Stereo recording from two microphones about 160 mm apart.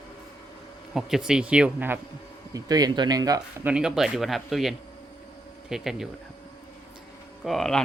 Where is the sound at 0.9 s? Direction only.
5° right (ahead or behind).